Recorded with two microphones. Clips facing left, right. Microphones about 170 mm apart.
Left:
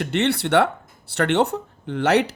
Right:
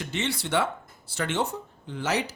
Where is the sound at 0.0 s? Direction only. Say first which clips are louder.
Left 9 dB; 65° left (ahead or behind).